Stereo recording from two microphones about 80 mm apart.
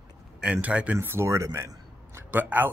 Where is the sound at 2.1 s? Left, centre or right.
Right.